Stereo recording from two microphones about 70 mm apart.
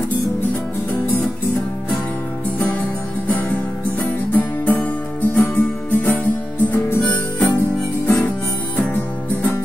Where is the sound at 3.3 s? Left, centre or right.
Left.